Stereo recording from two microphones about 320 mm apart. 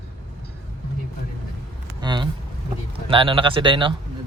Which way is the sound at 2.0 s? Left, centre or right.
Centre.